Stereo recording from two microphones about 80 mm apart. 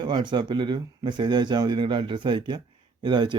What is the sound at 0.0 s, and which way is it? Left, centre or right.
Speech, right.